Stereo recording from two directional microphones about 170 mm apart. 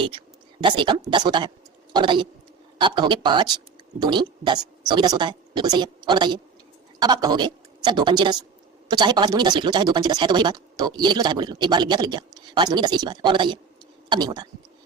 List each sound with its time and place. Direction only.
0.0 s speech: 30° right (ahead or behind)